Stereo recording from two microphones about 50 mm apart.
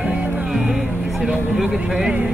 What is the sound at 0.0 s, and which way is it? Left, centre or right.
Music, centre.